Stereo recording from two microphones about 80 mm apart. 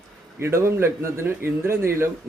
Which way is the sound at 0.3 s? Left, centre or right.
Right.